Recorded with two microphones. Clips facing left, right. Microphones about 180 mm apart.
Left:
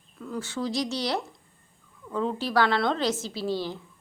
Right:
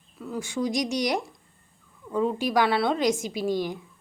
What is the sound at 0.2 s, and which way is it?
A woman's voice, 10° right (ahead or behind).